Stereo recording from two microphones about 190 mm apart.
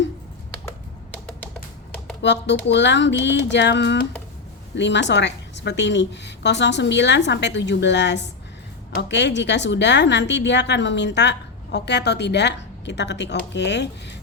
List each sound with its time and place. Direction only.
2.2 s a woman's voice: 65° left (ahead or behind)